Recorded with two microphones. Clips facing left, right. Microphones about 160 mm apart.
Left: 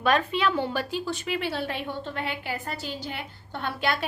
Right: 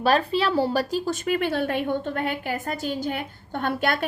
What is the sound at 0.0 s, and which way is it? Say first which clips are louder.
A woman's voice: right 2 dB; 35° right (ahead or behind).